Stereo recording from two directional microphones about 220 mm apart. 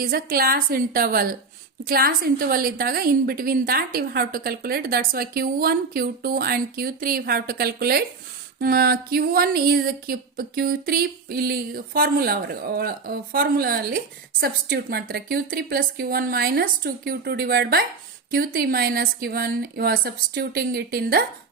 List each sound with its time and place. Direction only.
0.0 s a woman's voice: 40° right (ahead or behind)